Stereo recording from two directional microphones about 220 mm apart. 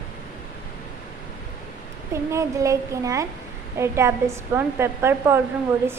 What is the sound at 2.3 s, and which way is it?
A woman's voice, 15° right (ahead or behind).